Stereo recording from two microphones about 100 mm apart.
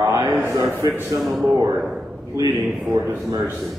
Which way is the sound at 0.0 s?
30° right (ahead or behind).